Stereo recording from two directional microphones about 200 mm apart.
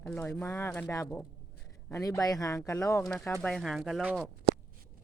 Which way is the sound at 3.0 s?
5° left (ahead or behind).